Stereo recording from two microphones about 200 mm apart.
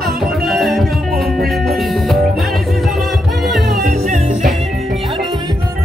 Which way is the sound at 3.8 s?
40° right (ahead or behind).